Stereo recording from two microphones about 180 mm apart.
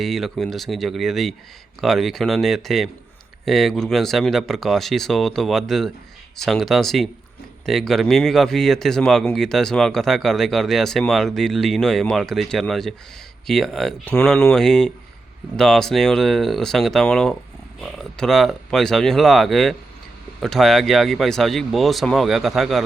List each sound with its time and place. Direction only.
0.0 s speech: centre (ahead or behind)